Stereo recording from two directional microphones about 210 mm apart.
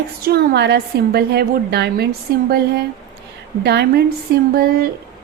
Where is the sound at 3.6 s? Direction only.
50° right (ahead or behind).